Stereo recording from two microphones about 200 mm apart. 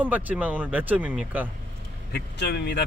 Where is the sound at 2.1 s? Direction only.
55° left (ahead or behind).